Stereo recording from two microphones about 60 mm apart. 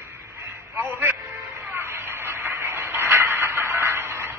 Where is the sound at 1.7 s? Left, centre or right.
Right.